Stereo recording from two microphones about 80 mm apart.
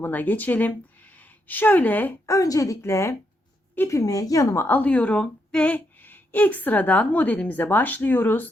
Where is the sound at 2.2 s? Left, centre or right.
Left.